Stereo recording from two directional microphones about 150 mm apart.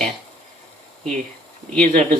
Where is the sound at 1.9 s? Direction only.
50° right (ahead or behind).